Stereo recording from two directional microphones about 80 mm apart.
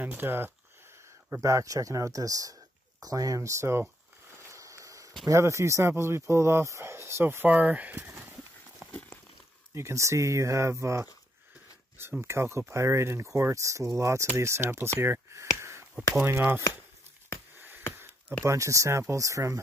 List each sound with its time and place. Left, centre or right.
0.0 s speech: right
1.4 s speech: right
4.4 s a sound: right
5.3 s speech: right
7.5 s speech: centre
8.2 s horse: right
9.8 s speech: right
17.6 s a sound: right
18.4 s speech: right